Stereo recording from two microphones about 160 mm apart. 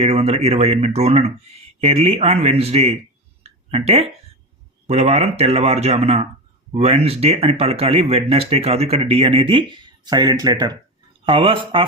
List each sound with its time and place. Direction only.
0.0 s speech: 40° right (ahead or behind)